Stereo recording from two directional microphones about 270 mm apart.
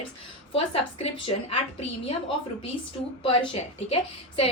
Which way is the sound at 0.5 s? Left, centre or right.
Centre.